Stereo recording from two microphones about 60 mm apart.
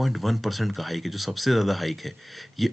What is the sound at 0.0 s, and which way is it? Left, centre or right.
Speech, centre.